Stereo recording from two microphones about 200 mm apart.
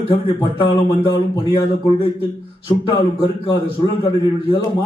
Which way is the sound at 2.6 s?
25° left (ahead or behind).